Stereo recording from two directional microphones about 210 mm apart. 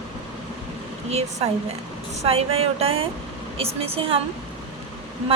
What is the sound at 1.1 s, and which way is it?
A woman's voice, 30° right (ahead or behind).